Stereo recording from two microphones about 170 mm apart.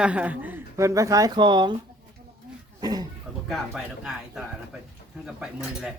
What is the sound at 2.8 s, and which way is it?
Cough, 25° right (ahead or behind).